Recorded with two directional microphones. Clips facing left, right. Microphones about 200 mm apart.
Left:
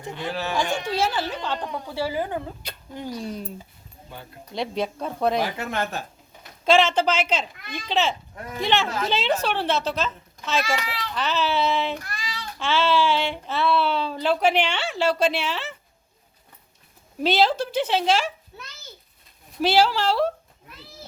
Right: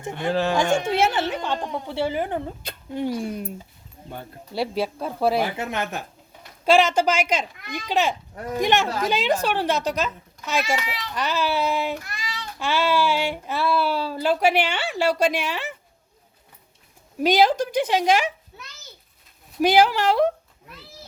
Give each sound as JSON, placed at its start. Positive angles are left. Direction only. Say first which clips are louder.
{"t": 0.1, "sound": "speech", "louder": "right 6 dB", "side_deg": -50}
{"t": 0.9, "sound": "speech", "louder": "right 3 dB", "side_deg": -25}
{"t": 4.5, "sound": "speech", "louder": "right 2 dB", "side_deg": -5}
{"t": 5.5, "sound": "speech", "louder": "even", "side_deg": -15}
{"t": 8.7, "sound": "a woman's voice", "louder": "even", "side_deg": -40}
{"t": 9.0, "sound": "speech", "louder": "right 2 dB", "side_deg": -10}
{"t": 17.2, "sound": "speech", "louder": "right 2 dB", "side_deg": -15}
{"t": 19.6, "sound": "speech", "louder": "right 2 dB", "side_deg": -15}